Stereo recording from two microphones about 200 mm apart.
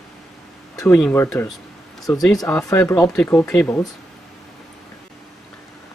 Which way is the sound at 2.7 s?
10° left (ahead or behind).